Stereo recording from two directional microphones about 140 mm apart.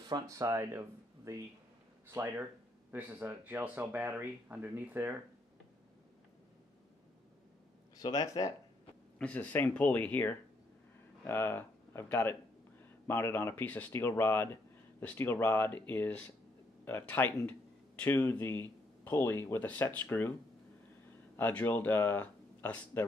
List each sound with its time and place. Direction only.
0.1 s speech: 25° right (ahead or behind)
8.0 s speech: 30° left (ahead or behind)
9.2 s speech: 10° left (ahead or behind)
21.4 s speech: 15° left (ahead or behind)